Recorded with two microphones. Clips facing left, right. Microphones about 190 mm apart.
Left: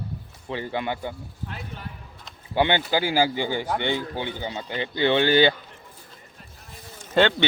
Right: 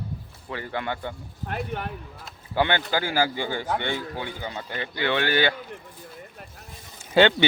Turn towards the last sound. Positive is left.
turn(degrees=-5)  # may be behind; listen again after turning